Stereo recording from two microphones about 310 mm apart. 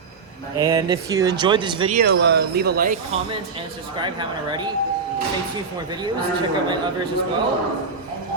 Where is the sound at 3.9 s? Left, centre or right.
Centre.